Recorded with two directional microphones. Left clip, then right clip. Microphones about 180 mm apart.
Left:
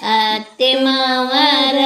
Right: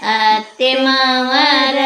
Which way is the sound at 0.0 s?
35° left (ahead or behind).